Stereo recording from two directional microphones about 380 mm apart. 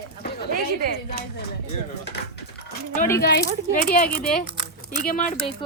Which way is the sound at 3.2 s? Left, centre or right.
Left.